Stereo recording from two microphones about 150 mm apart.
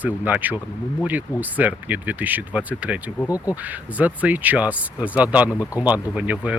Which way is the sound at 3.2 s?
20° left (ahead or behind).